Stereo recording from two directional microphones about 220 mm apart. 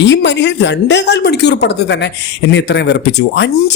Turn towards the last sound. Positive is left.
turn(degrees=50)  # may be behind; listen again after turning